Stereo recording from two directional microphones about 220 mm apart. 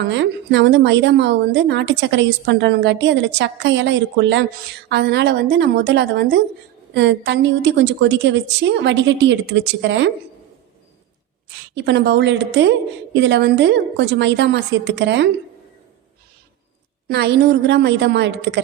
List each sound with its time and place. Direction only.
0.0 s a woman's voice: 50° right (ahead or behind)
11.7 s a woman's voice: 50° right (ahead or behind)
17.1 s a woman's voice: 50° right (ahead or behind)